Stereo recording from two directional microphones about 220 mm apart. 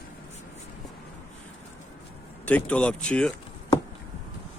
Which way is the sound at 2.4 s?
5° left (ahead or behind).